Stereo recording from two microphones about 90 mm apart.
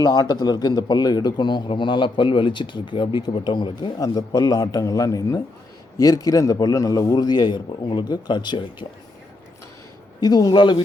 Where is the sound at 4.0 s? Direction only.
45° left (ahead or behind).